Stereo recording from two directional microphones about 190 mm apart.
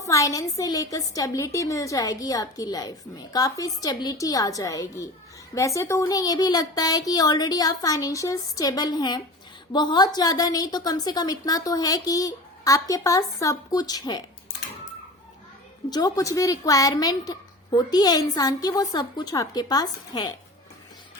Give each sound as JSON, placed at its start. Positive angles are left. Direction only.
{"t": 0.0, "sound": "a woman's voice", "side_deg": 15}
{"t": 15.9, "sound": "a woman's voice", "side_deg": 20}